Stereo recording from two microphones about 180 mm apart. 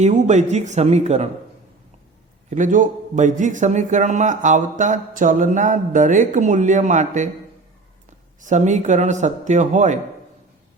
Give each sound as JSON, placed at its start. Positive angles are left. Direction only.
{"t": 0.0, "sound": "a man's voice", "side_deg": -40}
{"t": 2.5, "sound": "a man's voice", "side_deg": -45}
{"t": 8.4, "sound": "a man's voice", "side_deg": -45}